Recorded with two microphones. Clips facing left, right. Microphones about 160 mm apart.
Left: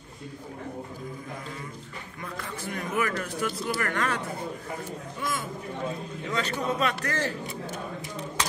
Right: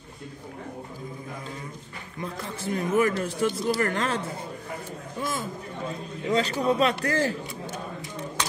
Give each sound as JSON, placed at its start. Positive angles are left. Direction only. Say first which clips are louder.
{"t": 2.2, "sound": "a man's voice", "louder": "right 4 dB", "side_deg": -30}
{"t": 6.2, "sound": "a man's voice", "louder": "right 6 dB", "side_deg": -30}